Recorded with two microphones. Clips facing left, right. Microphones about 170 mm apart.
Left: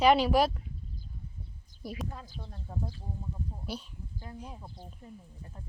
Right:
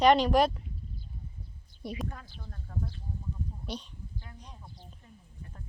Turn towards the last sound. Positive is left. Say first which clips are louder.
# even
turn(degrees=5)  # may be behind; listen again after turning